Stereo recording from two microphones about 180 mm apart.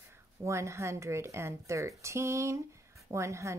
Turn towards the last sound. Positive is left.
turn(degrees=-15)  # may be behind; listen again after turning